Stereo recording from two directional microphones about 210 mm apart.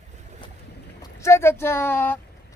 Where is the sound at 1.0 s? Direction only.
15° left (ahead or behind).